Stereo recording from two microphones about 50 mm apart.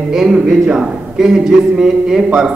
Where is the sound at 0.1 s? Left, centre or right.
Centre.